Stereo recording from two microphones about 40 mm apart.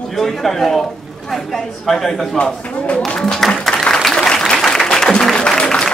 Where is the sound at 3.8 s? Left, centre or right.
Centre.